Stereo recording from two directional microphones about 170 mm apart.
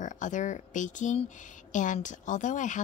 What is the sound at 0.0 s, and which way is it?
A woman's voice, 45° left (ahead or behind).